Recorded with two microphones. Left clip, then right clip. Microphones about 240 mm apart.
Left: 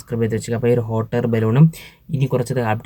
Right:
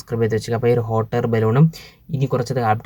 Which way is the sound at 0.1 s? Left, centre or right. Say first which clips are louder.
Right 2 dB; centre.